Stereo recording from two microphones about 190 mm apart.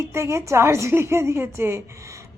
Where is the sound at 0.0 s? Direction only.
15° right (ahead or behind).